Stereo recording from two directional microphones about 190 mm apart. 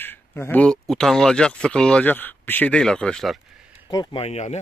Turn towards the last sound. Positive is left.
turn(degrees=35)  # may be behind; listen again after turning